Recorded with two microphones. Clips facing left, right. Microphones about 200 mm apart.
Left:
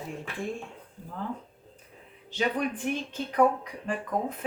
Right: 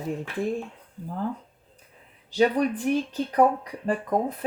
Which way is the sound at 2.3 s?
35° right (ahead or behind).